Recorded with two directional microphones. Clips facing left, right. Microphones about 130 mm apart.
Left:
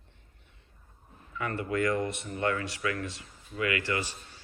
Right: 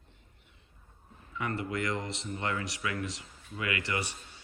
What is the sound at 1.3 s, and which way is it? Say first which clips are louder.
Speech: left 3 dB; 20° right (ahead or behind).